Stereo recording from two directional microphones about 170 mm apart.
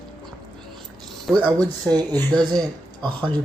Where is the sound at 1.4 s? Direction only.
25° right (ahead or behind).